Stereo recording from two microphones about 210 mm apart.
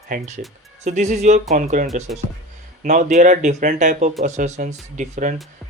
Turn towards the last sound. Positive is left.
turn(degrees=-35)  # may be behind; listen again after turning